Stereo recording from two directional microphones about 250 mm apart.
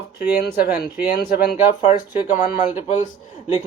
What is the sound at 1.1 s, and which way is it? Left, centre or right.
Speech, left.